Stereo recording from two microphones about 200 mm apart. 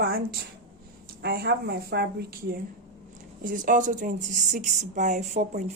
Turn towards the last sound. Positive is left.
turn(degrees=-35)  # may be behind; listen again after turning